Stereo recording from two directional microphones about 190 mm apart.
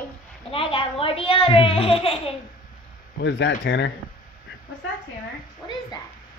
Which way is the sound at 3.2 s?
65° left (ahead or behind).